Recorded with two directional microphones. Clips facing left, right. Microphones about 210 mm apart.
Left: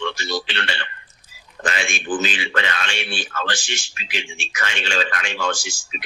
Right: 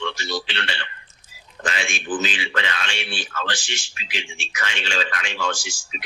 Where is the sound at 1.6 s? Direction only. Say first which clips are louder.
Left 2 dB; 50° left (ahead or behind).